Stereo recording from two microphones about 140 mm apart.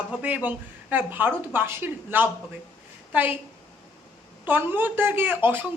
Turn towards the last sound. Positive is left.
turn(degrees=-15)  # may be behind; listen again after turning